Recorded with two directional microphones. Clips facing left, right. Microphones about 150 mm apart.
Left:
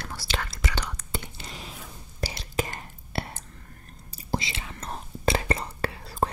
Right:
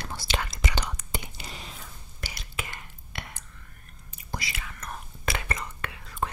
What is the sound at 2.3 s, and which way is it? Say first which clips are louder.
Whispering: left 8 dB; 35° left (ahead or behind).